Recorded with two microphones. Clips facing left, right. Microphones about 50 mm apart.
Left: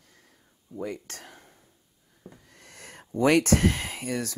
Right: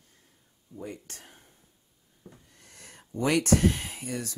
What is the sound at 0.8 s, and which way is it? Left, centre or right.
Speech, left.